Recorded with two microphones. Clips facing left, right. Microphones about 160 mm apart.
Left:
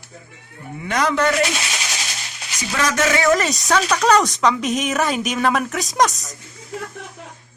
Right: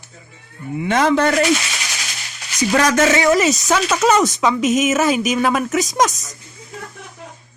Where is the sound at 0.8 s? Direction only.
25° right (ahead or behind).